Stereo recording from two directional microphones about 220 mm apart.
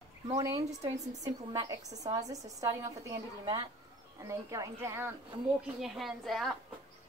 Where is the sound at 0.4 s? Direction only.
15° right (ahead or behind).